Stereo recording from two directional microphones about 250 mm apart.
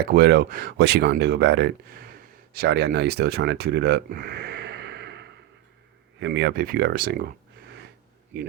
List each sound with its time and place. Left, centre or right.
0.0 s speech: right